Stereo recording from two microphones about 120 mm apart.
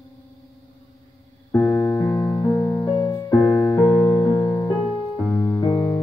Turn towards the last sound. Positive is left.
turn(degrees=30)  # may be behind; listen again after turning